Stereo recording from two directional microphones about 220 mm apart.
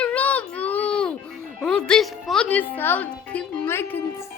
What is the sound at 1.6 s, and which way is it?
A woman's voice, 5° left (ahead or behind).